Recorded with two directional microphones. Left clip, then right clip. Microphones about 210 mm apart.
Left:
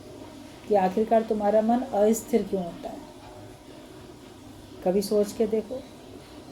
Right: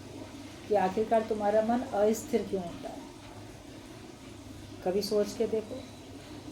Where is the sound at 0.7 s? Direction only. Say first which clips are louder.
Left 5 dB; 40° left (ahead or behind).